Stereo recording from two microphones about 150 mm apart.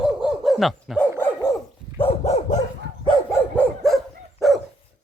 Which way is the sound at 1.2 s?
20° left (ahead or behind).